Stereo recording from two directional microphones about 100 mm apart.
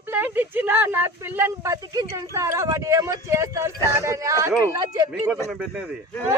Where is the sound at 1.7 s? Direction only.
35° right (ahead or behind).